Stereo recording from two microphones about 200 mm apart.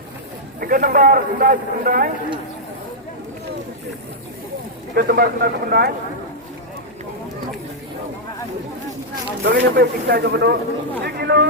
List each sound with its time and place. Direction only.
0.6 s a man's voice: 45° right (ahead or behind)
4.9 s a man's voice: 50° right (ahead or behind)
9.4 s a man's voice: 60° right (ahead or behind)